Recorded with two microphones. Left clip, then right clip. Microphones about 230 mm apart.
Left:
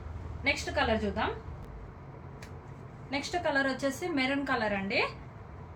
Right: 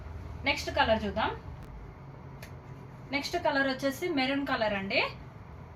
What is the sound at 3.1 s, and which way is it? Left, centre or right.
A woman's voice, centre.